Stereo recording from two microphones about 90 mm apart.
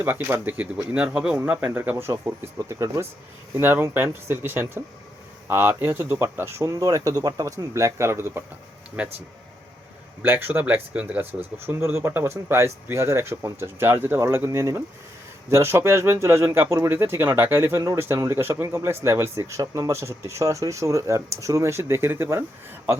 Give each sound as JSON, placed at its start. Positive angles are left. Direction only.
{"t": 0.0, "sound": "speech", "side_deg": -25}
{"t": 10.2, "sound": "speech", "side_deg": -20}
{"t": 11.3, "sound": "speech", "side_deg": -90}
{"t": 11.6, "sound": "speech", "side_deg": -25}